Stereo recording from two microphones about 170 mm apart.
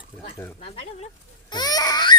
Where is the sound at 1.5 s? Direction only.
25° left (ahead or behind).